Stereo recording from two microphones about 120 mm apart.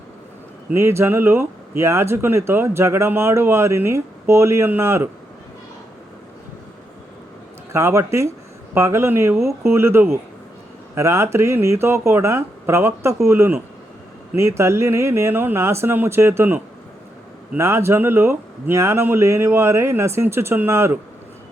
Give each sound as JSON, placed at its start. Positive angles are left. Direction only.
{"t": 0.7, "sound": "speech", "side_deg": -20}
{"t": 7.7, "sound": "speech", "side_deg": -25}
{"t": 17.6, "sound": "speech", "side_deg": -20}